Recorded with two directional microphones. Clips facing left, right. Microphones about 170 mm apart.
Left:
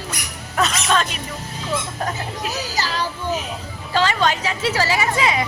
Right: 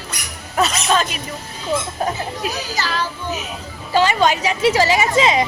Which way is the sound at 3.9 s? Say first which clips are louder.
Right 3 dB; 15° right (ahead or behind).